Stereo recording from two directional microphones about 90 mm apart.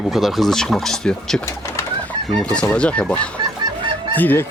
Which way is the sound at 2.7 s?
15° left (ahead or behind).